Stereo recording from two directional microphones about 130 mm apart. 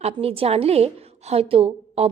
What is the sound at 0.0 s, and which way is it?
A woman's voice, 50° right (ahead or behind).